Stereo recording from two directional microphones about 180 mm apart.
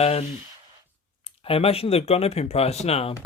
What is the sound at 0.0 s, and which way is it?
Speech, 35° left (ahead or behind).